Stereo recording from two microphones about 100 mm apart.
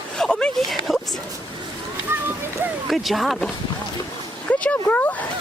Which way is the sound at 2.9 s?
Centre (ahead or behind).